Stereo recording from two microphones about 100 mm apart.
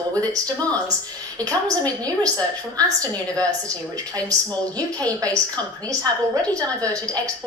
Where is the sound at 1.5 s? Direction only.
40° right (ahead or behind).